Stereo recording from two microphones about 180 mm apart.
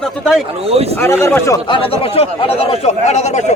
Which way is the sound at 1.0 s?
15° left (ahead or behind).